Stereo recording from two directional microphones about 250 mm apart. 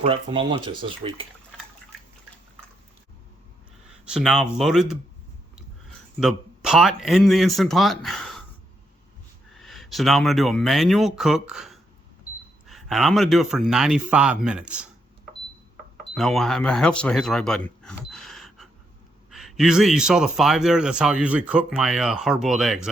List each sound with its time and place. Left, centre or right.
0.0 s speech: right
4.0 s a man's voice: centre
6.1 s a man's voice: centre
9.6 s a man's voice: centre
16.1 s a man's voice: centre